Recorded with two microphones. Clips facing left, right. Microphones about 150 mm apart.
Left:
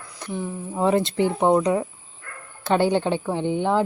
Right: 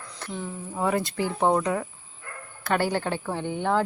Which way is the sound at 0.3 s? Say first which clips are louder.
Left 5 dB; 15° left (ahead or behind).